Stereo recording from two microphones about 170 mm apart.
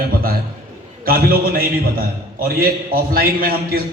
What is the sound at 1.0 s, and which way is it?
A man's voice, 60° right (ahead or behind).